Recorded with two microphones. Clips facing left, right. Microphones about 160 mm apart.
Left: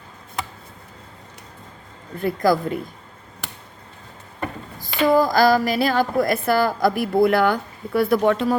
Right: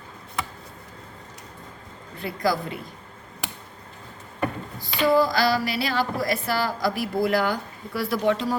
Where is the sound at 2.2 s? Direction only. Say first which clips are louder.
Left 6 dB; 50° left (ahead or behind).